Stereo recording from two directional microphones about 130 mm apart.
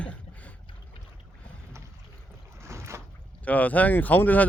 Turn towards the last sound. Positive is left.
turn(degrees=15)  # may be behind; listen again after turning